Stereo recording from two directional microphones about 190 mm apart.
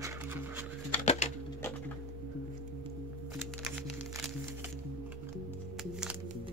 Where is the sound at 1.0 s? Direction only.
35° left (ahead or behind).